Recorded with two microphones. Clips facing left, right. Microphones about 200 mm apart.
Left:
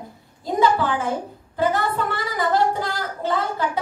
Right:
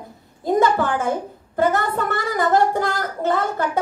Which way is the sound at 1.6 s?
50° right (ahead or behind).